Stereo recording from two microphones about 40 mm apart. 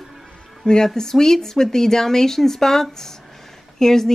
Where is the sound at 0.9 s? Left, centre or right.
Centre.